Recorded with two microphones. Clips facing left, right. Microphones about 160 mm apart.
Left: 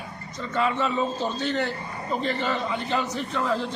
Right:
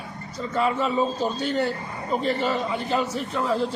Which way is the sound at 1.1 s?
10° right (ahead or behind).